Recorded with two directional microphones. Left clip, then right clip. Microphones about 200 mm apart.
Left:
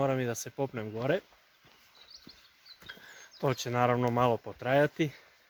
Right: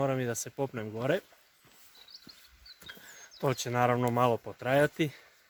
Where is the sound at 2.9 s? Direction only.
5° right (ahead or behind).